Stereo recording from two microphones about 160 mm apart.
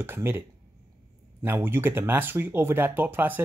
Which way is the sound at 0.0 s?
15° right (ahead or behind).